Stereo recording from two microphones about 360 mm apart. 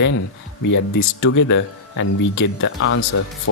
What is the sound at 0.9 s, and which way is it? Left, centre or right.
Speech, left.